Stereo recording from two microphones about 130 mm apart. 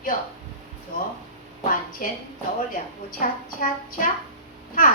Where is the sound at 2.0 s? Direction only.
90° left.